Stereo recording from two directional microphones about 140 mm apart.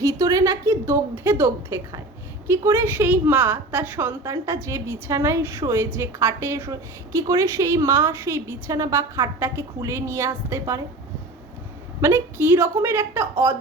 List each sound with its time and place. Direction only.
0.0 s a woman's voice: 25° right (ahead or behind)
12.0 s a woman's voice: 15° right (ahead or behind)